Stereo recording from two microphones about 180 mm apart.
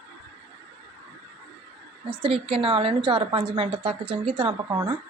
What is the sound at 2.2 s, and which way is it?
A woman's voice, 30° right (ahead or behind).